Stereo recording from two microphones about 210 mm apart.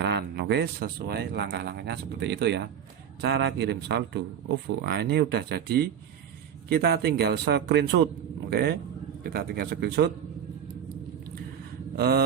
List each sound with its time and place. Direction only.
0.0 s a man's voice: 55° right (ahead or behind)
11.9 s a man's voice: 45° right (ahead or behind)